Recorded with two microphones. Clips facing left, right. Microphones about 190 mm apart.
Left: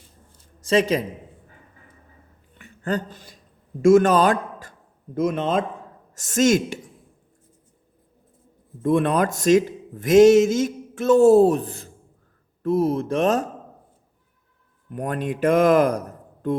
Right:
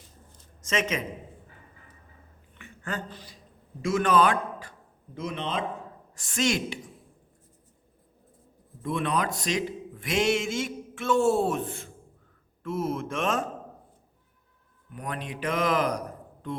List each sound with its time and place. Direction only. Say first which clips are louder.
0.6 s a man's voice: left 9 dB; 35° left (ahead or behind)
2.6 s a sound: left 9 dB; 35° left (ahead or behind)
3.8 s a man's voice: left 8 dB; 45° left (ahead or behind)
8.8 s a man's voice: left 9 dB; 50° left (ahead or behind)
14.9 s a man's voice: left 9 dB; 45° left (ahead or behind)